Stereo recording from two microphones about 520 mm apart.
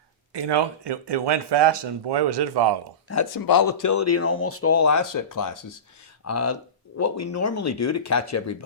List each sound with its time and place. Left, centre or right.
0.3 s speech: right
3.1 s speech: left